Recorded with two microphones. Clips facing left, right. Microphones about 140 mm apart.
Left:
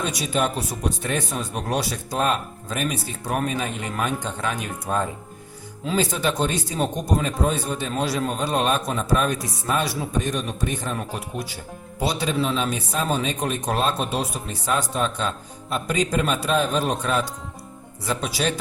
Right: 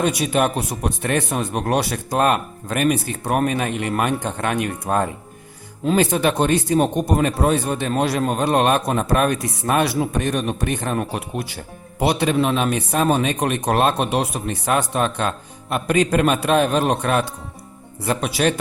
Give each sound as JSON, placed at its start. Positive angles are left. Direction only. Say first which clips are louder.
{"t": 0.0, "sound": "speech", "louder": "right 5 dB", "side_deg": -60}